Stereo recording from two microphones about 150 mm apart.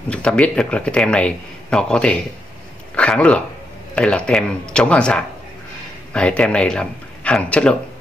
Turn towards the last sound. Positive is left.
turn(degrees=5)  # may be behind; listen again after turning